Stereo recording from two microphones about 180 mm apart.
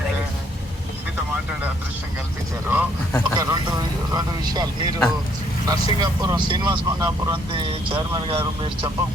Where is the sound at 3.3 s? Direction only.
20° right (ahead or behind).